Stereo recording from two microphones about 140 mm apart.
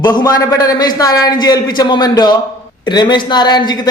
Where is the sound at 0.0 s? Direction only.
30° left (ahead or behind).